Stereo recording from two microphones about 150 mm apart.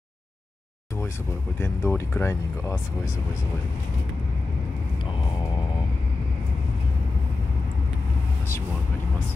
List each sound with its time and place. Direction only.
1.6 s speech: 20° left (ahead or behind)